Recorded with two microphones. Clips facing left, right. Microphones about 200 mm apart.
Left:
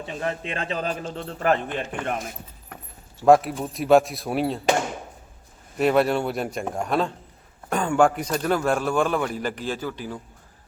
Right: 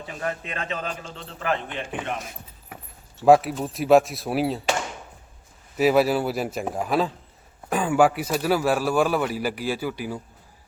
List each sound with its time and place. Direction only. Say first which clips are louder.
0.0 s speech: left 2 dB; 25° left (ahead or behind); by 1.8 s 45° left (ahead or behind)
2.7 s a sound: even; 5° right (ahead or behind)
3.2 s speech: even; centre (ahead or behind)
5.7 s a man's voice: right 1 dB; 5° right (ahead or behind)